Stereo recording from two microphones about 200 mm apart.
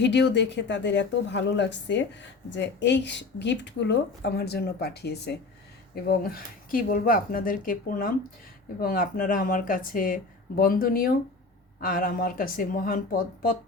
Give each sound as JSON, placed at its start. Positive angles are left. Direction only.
{"t": 0.0, "sound": "speech", "side_deg": 60}